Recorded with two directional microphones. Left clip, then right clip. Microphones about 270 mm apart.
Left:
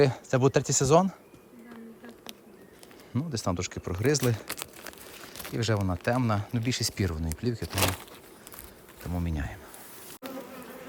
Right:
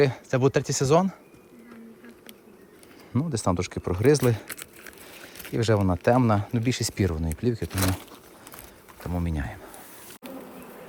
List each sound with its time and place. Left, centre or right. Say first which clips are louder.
0.0 s speech: right 1 dB; centre
3.1 s speech: right 5 dB; centre
4.8 s a sound: even; left
5.5 s speech: right 6 dB; centre
6.7 s speech: right 1 dB; left
7.1 s speech: right 5 dB; centre
9.0 s speech: right 4 dB; centre